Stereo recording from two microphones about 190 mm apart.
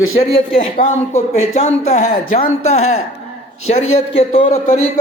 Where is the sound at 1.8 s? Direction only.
35° left (ahead or behind).